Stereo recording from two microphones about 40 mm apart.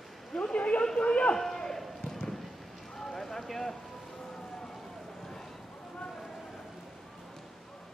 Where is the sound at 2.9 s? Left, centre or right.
Centre.